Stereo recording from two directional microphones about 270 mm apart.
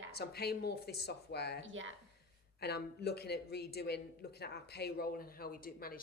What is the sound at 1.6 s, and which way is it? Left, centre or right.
Speech, right.